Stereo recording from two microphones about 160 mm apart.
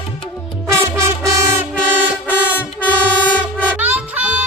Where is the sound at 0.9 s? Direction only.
20° right (ahead or behind).